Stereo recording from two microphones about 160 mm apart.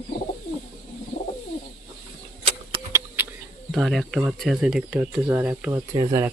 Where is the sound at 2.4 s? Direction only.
35° right (ahead or behind).